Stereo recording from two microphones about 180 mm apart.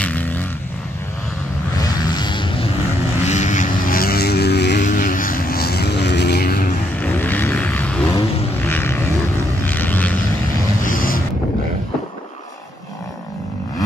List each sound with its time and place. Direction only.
0.0 s vehicle: 10° left (ahead or behind)
1.8 s vehicle: 25° left (ahead or behind)
3.3 s vehicle: 40° left (ahead or behind); by 4.8 s 65° left (ahead or behind)
4.8 s vehicle: 50° left (ahead or behind)
7.0 s vehicle: 10° left (ahead or behind)
10.8 s boat: 50° left (ahead or behind)